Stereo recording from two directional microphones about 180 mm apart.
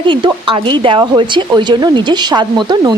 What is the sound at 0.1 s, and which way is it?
Speech, 25° right (ahead or behind).